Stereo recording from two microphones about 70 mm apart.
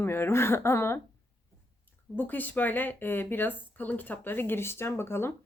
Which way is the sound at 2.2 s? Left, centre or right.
Left.